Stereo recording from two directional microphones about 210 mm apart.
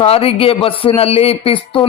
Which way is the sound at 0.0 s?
25° left (ahead or behind).